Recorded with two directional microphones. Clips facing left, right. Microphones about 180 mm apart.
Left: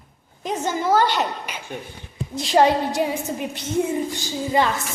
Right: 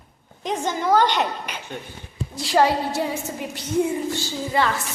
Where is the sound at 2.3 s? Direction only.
20° left (ahead or behind).